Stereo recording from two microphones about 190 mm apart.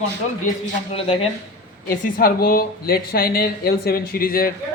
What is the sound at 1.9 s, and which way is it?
A woman's voice, 45° left (ahead or behind).